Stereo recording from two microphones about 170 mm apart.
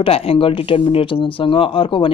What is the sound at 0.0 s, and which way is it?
Speech, 35° left (ahead or behind).